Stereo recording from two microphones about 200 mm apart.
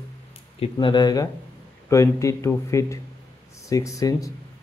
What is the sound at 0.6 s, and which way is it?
Speech, 25° left (ahead or behind).